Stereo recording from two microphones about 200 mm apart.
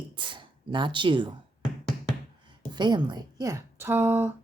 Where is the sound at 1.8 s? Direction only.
Centre (ahead or behind).